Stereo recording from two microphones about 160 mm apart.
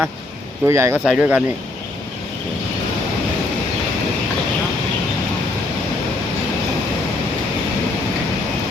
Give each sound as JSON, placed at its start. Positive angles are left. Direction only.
{"t": 0.6, "sound": "speech", "side_deg": -15}
{"t": 1.0, "sound": "speech", "side_deg": -5}